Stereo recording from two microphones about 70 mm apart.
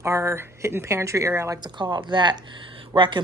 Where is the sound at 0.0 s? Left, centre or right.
Right.